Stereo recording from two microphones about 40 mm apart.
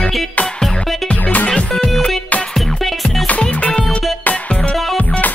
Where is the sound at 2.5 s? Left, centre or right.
Centre.